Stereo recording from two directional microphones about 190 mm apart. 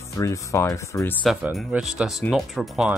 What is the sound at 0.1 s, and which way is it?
Speech, 15° left (ahead or behind).